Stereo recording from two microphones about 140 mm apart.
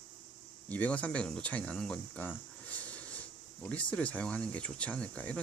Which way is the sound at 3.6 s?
10° left (ahead or behind).